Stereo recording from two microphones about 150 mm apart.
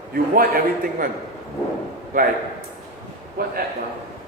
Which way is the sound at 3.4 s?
80° right.